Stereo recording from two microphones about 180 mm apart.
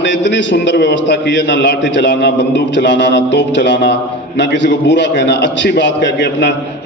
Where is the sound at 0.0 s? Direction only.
80° left.